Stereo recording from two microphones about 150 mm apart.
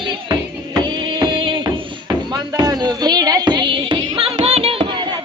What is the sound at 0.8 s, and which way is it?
Music, 30° right (ahead or behind).